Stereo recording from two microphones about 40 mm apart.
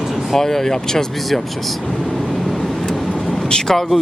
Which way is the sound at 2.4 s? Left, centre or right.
Centre.